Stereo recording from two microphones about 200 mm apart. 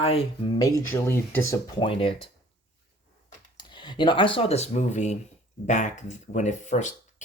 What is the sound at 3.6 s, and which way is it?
Speech, 20° left (ahead or behind).